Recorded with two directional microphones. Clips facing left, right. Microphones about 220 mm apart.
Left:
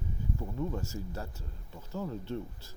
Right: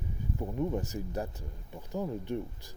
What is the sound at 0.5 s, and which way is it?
Speech, 20° right (ahead or behind).